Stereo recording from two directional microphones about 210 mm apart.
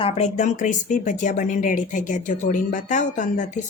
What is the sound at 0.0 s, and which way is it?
A woman's voice, 30° left (ahead or behind).